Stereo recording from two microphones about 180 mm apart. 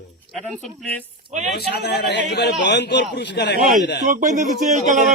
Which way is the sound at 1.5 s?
65° left (ahead or behind).